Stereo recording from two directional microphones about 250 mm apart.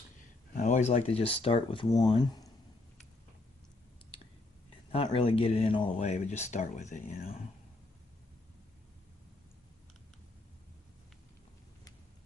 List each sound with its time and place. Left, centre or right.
0.5 s speech: left
4.9 s speech: left